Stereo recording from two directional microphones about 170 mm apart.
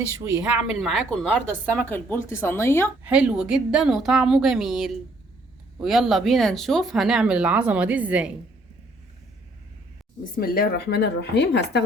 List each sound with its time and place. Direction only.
0.3 s speech: 5° right (ahead or behind); by 2.9 s 15° left (ahead or behind)
3.0 s speech: 5° right (ahead or behind)
10.4 s speech: 60° left (ahead or behind); by 11.8 s 85° left